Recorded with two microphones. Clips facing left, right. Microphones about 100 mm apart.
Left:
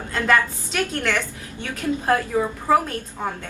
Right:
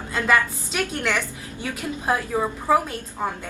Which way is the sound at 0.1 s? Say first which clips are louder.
Left 1 dB; 15° right (ahead or behind).